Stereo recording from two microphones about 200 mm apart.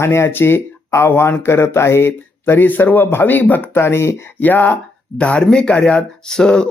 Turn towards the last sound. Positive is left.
turn(degrees=5)  # may be behind; listen again after turning